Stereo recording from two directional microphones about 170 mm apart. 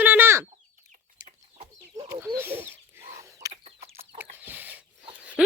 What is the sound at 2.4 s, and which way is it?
Bird, 15° right (ahead or behind).